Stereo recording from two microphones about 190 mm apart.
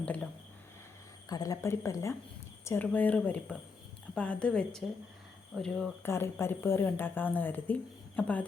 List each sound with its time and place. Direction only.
0.0 s speech: 5° left (ahead or behind)
1.3 s a woman's voice: 20° left (ahead or behind)